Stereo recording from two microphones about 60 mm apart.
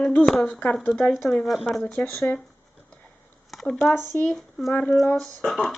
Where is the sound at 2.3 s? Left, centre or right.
Left.